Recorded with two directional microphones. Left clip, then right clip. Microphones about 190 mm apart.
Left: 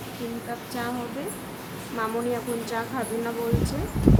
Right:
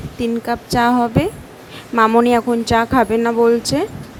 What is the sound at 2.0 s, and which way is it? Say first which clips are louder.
Speech: right 15 dB; 60° right (ahead or behind).